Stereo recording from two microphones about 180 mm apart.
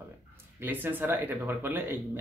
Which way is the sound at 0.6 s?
10° right (ahead or behind).